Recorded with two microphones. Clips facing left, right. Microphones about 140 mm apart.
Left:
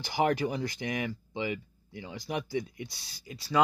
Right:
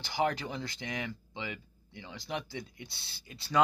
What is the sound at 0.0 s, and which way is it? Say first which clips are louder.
Speech: left 4 dB; 50° left (ahead or behind).